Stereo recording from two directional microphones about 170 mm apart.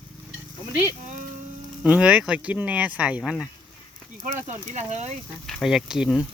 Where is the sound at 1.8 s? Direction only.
5° right (ahead or behind).